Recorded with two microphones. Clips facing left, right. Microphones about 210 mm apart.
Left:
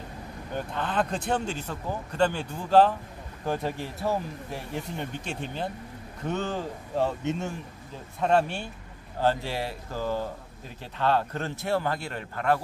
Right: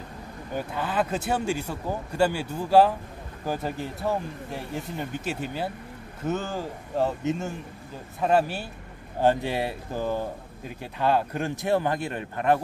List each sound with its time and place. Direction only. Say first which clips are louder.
0.6 s speech: right 1 dB; 5° right (ahead or behind)
9.2 s speech: right 4 dB; 15° right (ahead or behind)